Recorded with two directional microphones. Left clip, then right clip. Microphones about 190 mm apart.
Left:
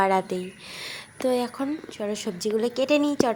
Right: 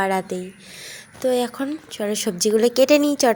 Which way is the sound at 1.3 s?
10° right (ahead or behind).